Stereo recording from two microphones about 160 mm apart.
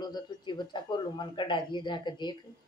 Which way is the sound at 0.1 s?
30° left (ahead or behind).